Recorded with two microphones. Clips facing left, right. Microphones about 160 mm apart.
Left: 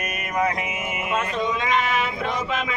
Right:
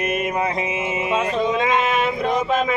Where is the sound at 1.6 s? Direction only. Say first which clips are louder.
Right 4 dB; 50° right (ahead or behind).